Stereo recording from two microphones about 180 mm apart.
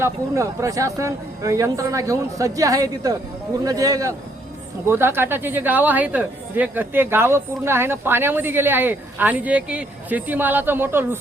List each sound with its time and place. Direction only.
0.0 s a woman's voice: 15° right (ahead or behind)